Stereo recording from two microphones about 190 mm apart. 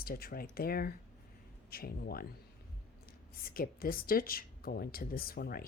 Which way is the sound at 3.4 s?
50° left (ahead or behind).